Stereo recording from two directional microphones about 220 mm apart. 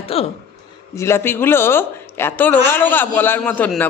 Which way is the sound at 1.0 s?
10° left (ahead or behind).